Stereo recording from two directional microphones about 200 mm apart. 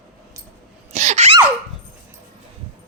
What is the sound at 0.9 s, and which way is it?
Sneeze, 35° right (ahead or behind).